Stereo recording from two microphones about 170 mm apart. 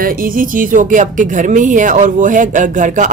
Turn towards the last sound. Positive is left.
turn(degrees=-45)  # may be behind; listen again after turning